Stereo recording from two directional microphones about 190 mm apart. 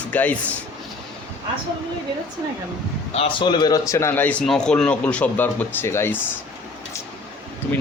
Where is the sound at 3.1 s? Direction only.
30° left (ahead or behind); by 6.2 s 10° left (ahead or behind).